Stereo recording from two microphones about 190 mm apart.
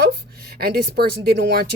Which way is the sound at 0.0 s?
55° right (ahead or behind).